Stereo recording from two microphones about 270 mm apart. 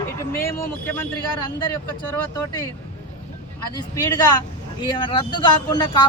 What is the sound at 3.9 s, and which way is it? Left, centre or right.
Speech, centre.